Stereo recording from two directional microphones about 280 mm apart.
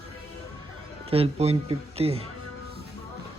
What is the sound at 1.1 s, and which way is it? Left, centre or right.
Speech, right.